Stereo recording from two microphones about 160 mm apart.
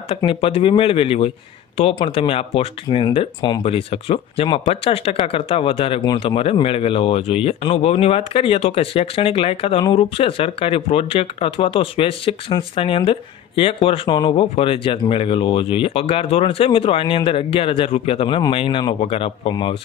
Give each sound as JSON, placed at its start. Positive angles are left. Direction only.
{"t": 0.1, "sound": "speech", "side_deg": 35}